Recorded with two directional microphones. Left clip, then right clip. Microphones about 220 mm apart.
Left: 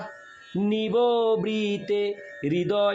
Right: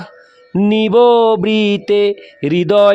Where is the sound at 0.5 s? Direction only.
50° right (ahead or behind).